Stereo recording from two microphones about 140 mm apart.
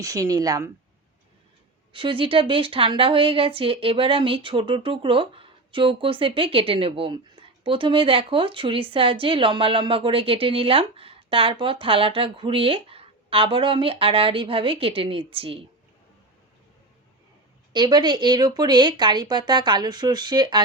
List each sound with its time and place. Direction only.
0.0 s speech: 25° right (ahead or behind)
1.9 s speech: 40° right (ahead or behind)
17.7 s speech: 30° right (ahead or behind)